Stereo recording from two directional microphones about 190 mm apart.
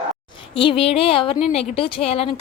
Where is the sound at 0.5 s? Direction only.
30° left (ahead or behind).